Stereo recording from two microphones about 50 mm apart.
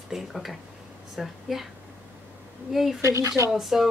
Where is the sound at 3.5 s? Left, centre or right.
Centre.